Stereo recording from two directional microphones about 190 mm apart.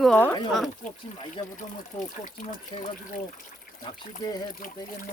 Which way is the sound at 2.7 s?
25° left (ahead or behind).